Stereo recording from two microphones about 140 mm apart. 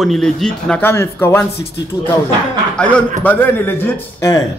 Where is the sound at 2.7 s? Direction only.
10° left (ahead or behind).